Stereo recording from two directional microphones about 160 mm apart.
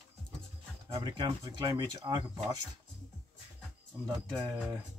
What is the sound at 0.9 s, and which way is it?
Speech, 30° right (ahead or behind).